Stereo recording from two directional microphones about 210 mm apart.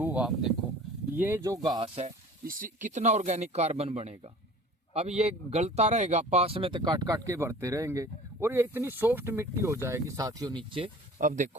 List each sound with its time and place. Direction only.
0.0 s speech: 5° right (ahead or behind)
2.4 s speech: 40° right (ahead or behind); by 10.9 s 25° right (ahead or behind)
11.2 s speech: 35° right (ahead or behind)